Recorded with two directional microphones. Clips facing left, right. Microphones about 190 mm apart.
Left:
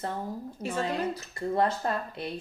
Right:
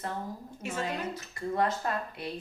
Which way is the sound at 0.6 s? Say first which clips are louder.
Left 4 dB; 35° left (ahead or behind).